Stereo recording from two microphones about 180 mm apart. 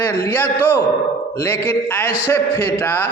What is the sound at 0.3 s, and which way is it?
A man's voice, 10° left (ahead or behind).